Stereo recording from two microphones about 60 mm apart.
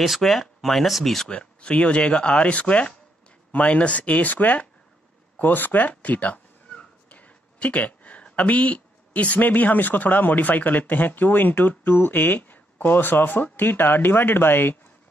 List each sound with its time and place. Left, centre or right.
0.0 s speech: centre
1.3 s speech: centre; by 14.8 s left